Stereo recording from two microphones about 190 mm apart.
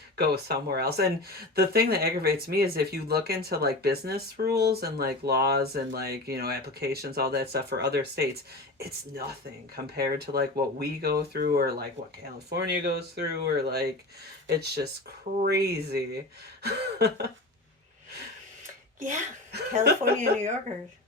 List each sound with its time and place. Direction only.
0.2 s speech: 55° right (ahead or behind)
19.5 s speech: 60° right (ahead or behind)